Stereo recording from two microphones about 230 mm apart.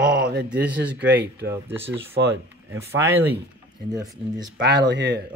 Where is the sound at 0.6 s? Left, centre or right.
Centre.